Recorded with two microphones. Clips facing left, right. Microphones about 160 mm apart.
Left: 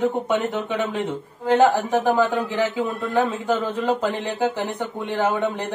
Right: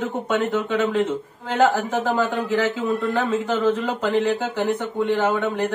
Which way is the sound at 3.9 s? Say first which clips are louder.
Right 2 dB; 15° left (ahead or behind).